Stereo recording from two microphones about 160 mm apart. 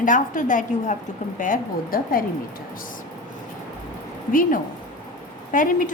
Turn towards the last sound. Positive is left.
turn(degrees=55)  # may be behind; listen again after turning